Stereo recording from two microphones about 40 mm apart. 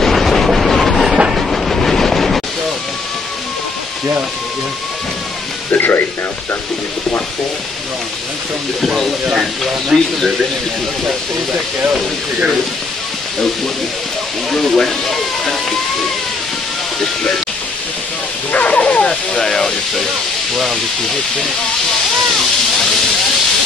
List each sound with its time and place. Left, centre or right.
0.0 s train: centre
5.7 s speech: left
8.8 s speech: centre
9.3 s speech: centre
14.5 s speech: centre
18.5 s a sound: left
19.0 s speech: centre
20.5 s speech: centre